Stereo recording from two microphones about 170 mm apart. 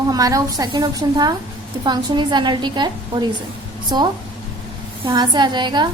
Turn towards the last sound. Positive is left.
turn(degrees=-25)  # may be behind; listen again after turning